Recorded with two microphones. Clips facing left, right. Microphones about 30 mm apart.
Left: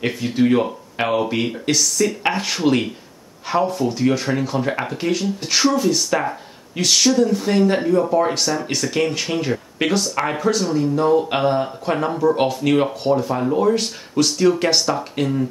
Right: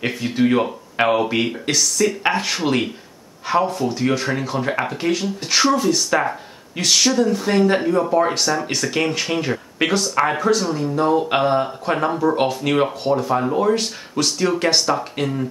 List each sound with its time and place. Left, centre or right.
0.0 s speech: centre
12.4 s speech: centre
13.7 s speech: centre